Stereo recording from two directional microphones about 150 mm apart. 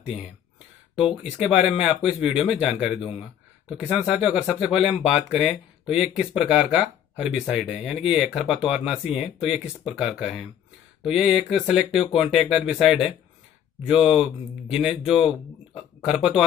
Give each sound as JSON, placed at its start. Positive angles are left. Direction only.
{"t": 0.9, "sound": "speech", "side_deg": -5}
{"t": 3.0, "sound": "speech", "side_deg": 40}
{"t": 3.6, "sound": "speech", "side_deg": -5}